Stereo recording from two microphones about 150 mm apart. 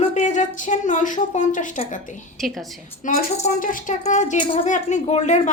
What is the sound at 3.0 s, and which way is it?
A woman's voice, 60° left (ahead or behind).